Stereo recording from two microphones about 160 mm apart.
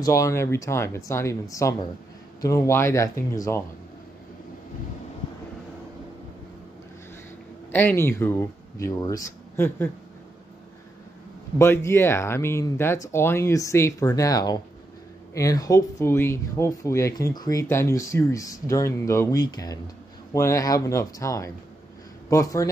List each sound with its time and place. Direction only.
0.0 s speech: 20° left (ahead or behind)
7.7 s speech: 15° left (ahead or behind)
11.5 s speech: 15° left (ahead or behind)